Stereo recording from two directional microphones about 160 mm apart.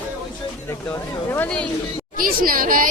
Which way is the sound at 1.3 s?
10° left (ahead or behind).